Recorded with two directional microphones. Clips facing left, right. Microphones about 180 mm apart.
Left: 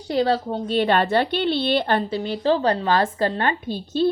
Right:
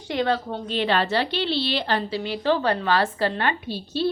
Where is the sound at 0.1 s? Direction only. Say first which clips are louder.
Left 3 dB; 35° left (ahead or behind).